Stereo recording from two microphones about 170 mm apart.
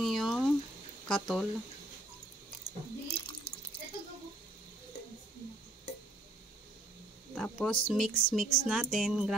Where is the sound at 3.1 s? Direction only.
30° left (ahead or behind).